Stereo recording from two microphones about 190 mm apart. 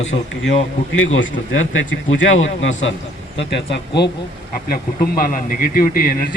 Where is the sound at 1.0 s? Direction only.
90° left.